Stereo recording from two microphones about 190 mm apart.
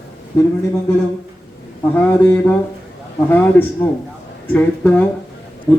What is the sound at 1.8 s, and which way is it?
Speech, 10° left (ahead or behind).